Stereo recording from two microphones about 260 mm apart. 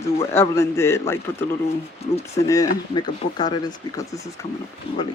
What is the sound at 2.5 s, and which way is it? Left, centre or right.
Speech, centre.